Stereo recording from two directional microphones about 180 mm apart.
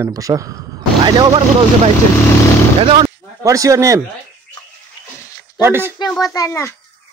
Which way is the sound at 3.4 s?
20° right (ahead or behind).